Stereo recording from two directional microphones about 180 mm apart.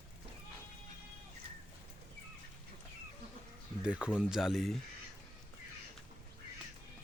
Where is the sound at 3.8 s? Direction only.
5° right (ahead or behind).